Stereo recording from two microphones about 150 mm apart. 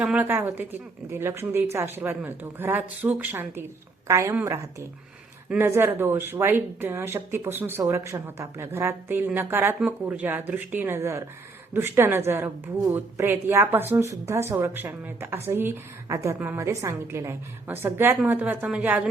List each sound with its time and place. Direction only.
0.0 s speech: 10° right (ahead or behind)